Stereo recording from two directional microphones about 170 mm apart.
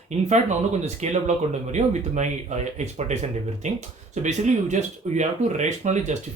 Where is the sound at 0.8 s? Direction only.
40° right (ahead or behind).